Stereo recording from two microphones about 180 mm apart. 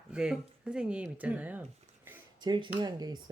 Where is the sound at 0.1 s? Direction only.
5° right (ahead or behind).